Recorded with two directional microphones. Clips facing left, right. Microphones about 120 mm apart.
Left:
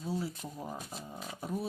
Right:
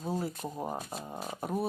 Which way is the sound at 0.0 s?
50° right (ahead or behind).